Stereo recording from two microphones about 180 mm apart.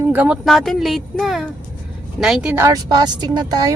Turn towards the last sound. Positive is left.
turn(degrees=-20)  # may be behind; listen again after turning